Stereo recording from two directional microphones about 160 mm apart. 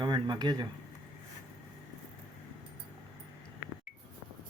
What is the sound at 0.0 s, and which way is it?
Speech, 25° right (ahead or behind).